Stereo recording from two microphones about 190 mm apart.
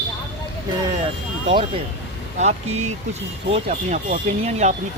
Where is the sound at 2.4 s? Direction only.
35° right (ahead or behind).